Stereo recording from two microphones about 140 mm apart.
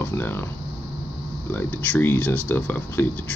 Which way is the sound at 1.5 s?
10° left (ahead or behind).